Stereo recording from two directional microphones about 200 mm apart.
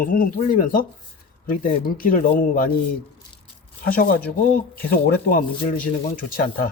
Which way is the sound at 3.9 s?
45° left (ahead or behind).